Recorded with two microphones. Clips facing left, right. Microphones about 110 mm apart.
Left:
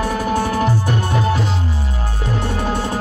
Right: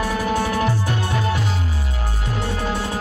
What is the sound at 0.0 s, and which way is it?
Music, 30° left (ahead or behind).